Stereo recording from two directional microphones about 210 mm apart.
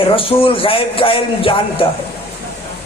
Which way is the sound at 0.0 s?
25° left (ahead or behind).